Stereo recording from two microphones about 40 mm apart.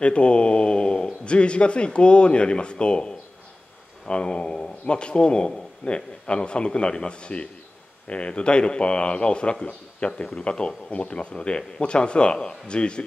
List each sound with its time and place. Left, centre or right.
0.0 s a man's voice: left
4.1 s a man's voice: left